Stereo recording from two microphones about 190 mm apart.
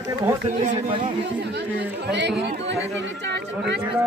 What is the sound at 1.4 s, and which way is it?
Speech, 60° right (ahead or behind).